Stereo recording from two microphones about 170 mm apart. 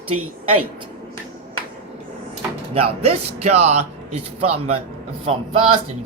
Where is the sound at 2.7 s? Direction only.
35° right (ahead or behind).